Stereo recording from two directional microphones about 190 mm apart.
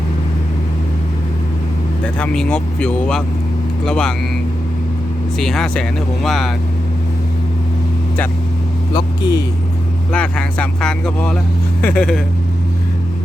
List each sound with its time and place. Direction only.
2.1 s speech: 5° left (ahead or behind)
5.4 s speech: centre (ahead or behind)
8.9 s speech: 20° left (ahead or behind)
10.1 s speech: 5° left (ahead or behind)